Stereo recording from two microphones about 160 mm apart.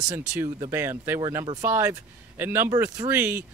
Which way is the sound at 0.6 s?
15° right (ahead or behind).